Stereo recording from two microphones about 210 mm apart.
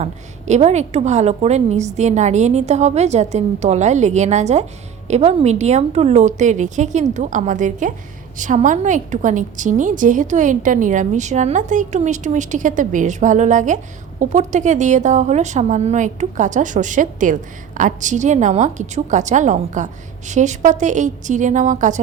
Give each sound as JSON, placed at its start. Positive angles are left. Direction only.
{"t": 0.0, "sound": "a woman's voice", "side_deg": -30}